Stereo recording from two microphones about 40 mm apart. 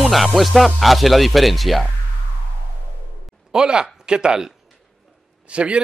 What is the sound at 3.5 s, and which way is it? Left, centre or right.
Speech, centre.